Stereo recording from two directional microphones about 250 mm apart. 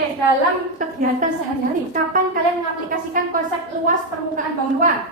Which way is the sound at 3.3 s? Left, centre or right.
Right.